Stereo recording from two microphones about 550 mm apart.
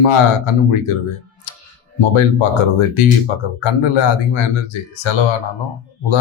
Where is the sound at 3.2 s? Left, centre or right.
Left.